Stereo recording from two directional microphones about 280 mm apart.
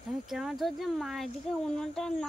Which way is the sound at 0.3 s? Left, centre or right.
Centre.